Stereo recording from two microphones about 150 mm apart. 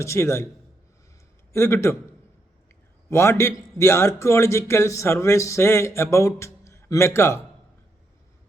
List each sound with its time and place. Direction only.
0.0 s speech: 20° left (ahead or behind)
1.5 s a man's voice: 20° left (ahead or behind)
3.1 s a man's voice: 20° left (ahead or behind)